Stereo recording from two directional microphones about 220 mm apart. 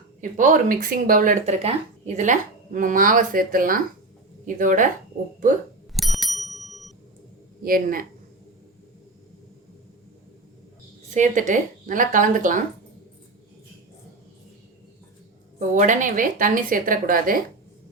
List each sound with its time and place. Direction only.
0.2 s speech: 35° right (ahead or behind)
6.0 s bicycle bell: centre (ahead or behind)
7.6 s speech: 40° right (ahead or behind)
11.1 s speech: 35° right (ahead or behind)
15.5 s speech: 35° right (ahead or behind)